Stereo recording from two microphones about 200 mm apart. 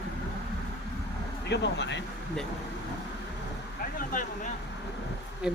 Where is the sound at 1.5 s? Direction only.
60° left (ahead or behind).